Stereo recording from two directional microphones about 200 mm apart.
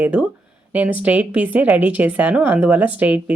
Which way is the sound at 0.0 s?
5° right (ahead or behind).